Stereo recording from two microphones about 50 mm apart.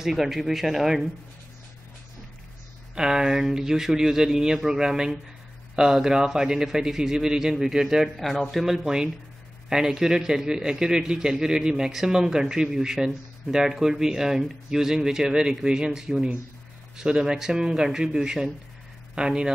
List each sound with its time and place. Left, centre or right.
0.0 s speech: centre
2.9 s speech: centre
8.2 s speech: centre
8.6 s speech: centre